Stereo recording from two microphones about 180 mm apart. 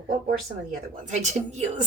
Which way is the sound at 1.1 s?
40° right (ahead or behind).